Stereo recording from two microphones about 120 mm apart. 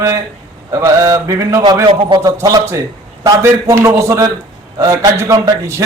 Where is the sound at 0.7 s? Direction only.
25° right (ahead or behind).